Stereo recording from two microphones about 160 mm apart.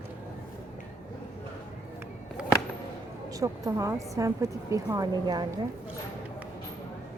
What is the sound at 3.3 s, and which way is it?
Speech, 20° right (ahead or behind).